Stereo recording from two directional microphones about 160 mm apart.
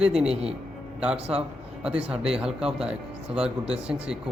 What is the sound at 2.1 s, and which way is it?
A man's voice, 5° right (ahead or behind).